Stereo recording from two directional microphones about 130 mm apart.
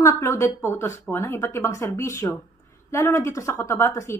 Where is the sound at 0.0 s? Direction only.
20° left (ahead or behind).